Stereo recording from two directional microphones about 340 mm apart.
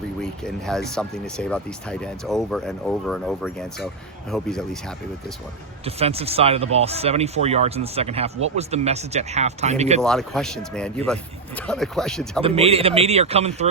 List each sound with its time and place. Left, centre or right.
0.2 s speech: centre
5.8 s speech: centre
10.0 s speech: centre
12.4 s speech: centre